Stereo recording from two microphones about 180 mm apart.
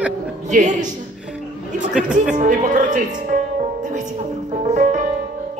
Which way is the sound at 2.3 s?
45° right (ahead or behind).